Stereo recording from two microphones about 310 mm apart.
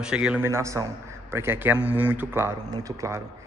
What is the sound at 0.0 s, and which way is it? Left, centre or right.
Speech, centre.